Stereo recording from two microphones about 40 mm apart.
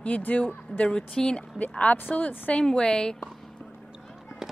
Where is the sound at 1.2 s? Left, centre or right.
Left.